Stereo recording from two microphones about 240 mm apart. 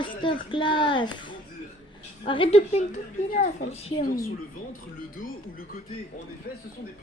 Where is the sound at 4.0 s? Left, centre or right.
Left.